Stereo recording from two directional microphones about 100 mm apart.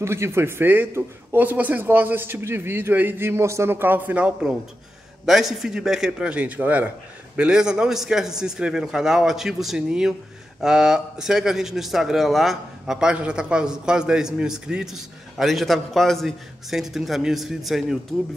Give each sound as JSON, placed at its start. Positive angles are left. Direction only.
{"t": 0.0, "sound": "a man's voice", "side_deg": -25}